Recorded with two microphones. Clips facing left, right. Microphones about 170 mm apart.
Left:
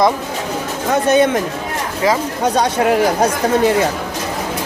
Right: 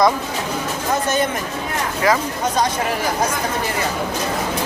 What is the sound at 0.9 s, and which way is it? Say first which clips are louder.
Speech: left 7 dB; 70° left (ahead or behind).